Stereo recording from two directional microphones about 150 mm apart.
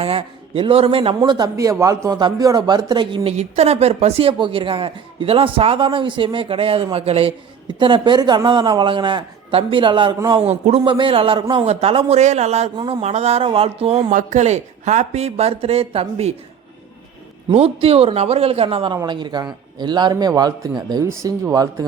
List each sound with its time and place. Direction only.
0.0 s a man's voice: 40° right (ahead or behind)
3.3 s speech: 45° right (ahead or behind)
10.4 s speech: 45° right (ahead or behind)
10.8 s speech: 35° right (ahead or behind)
12.7 s speech: 30° right (ahead or behind)
13.0 s speech: 45° right (ahead or behind)
14.1 s speech: 55° right (ahead or behind); by 16.3 s 40° right (ahead or behind)
17.5 s a man's voice: 40° right (ahead or behind); by 21.8 s 25° right (ahead or behind)